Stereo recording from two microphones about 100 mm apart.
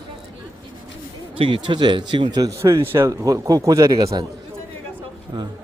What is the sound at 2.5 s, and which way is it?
A man's voice, 30° right (ahead or behind).